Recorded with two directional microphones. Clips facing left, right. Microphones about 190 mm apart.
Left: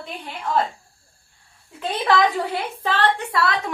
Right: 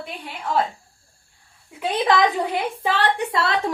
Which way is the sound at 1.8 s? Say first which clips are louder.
Right 1 dB; 15° right (ahead or behind).